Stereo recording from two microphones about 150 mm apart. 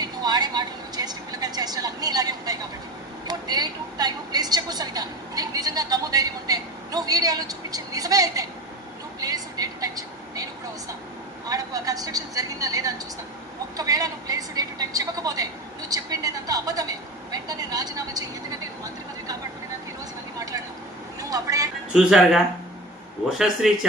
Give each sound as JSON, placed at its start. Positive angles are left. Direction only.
{"t": 0.0, "sound": "vehicle", "side_deg": -25}
{"t": 3.2, "sound": "a woman's voice", "side_deg": -25}
{"t": 9.2, "sound": "vehicle", "side_deg": -25}
{"t": 13.7, "sound": "a sound", "side_deg": -25}
{"t": 17.3, "sound": "vehicle", "side_deg": -25}
{"t": 21.2, "sound": "vehicle", "side_deg": -25}
{"t": 21.9, "sound": "speech", "side_deg": -5}
{"t": 23.6, "sound": "speech", "side_deg": 0}